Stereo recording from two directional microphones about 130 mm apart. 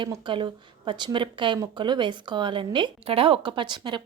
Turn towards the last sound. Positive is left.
turn(degrees=-35)  # may be behind; listen again after turning